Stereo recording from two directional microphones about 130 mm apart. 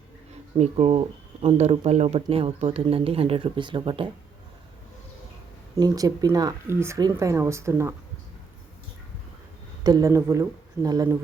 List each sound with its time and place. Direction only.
0.5 s speech: 55° right (ahead or behind)
5.7 s speech: 30° right (ahead or behind)
9.8 s speech: 25° right (ahead or behind)